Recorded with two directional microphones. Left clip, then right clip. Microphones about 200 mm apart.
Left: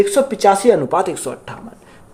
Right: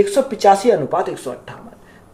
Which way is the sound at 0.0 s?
35° left (ahead or behind).